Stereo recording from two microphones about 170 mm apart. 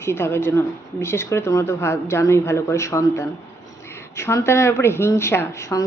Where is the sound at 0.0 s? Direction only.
15° left (ahead or behind).